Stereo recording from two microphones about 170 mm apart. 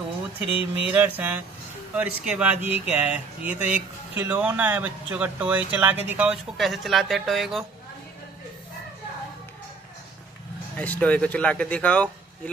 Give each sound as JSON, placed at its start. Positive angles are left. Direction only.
{"t": 0.4, "sound": "speech", "side_deg": 30}
{"t": 0.8, "sound": "speech", "side_deg": -10}
{"t": 10.8, "sound": "speech", "side_deg": 10}